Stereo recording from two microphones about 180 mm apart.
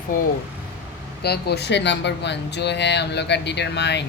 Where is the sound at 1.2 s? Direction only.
65° left (ahead or behind).